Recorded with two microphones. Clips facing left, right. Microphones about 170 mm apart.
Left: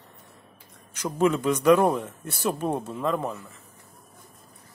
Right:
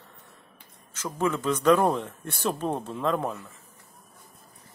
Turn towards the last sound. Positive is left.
turn(degrees=0)  # may be behind; listen again after turning